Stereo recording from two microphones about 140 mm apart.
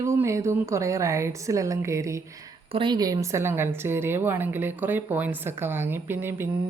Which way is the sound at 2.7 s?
35° right (ahead or behind).